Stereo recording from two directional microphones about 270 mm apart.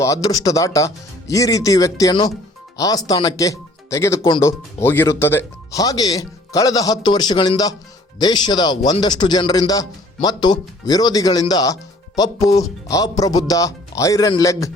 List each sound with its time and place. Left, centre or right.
0.0 s speech: centre